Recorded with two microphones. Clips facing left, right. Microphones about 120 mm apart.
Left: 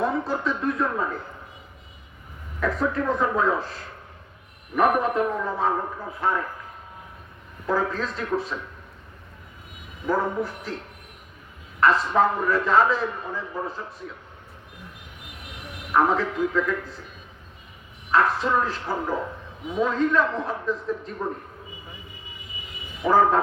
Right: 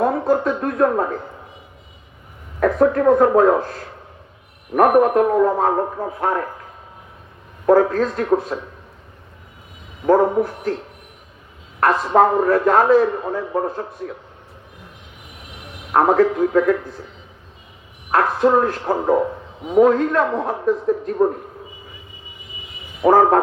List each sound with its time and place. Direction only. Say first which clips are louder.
0.0 s a sound: right 8 dB; 50° right (ahead or behind)
0.4 s a man's voice: right 7 dB; 50° right (ahead or behind)
2.6 s a man's voice: right 9 dB; 50° right (ahead or behind)
7.7 s a man's voice: right 11 dB; 55° right (ahead or behind)
10.1 s a man's voice: right 10 dB; 50° right (ahead or behind)
11.8 s a man's voice: right 5 dB; 55° right (ahead or behind)
14.0 s a man's voice: right 8 dB; 65° right (ahead or behind)
15.9 s a man's voice: right 7 dB; 50° right (ahead or behind)
18.1 s a man's voice: right 6 dB; 50° right (ahead or behind)
23.0 s a man's voice: right 6 dB; 50° right (ahead or behind)